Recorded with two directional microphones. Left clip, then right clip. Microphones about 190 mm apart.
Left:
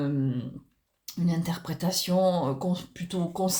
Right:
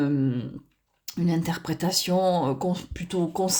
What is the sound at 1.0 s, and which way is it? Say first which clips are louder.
Speech: right 4 dB; 40° right (ahead or behind).